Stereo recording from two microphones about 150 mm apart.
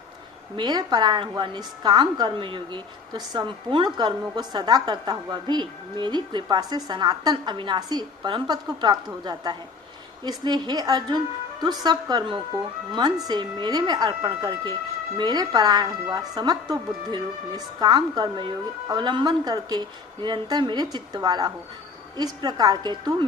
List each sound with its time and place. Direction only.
0.5 s a woman's voice: 30° right (ahead or behind)